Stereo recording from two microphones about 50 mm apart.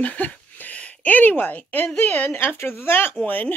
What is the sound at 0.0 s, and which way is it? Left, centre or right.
Speech, left.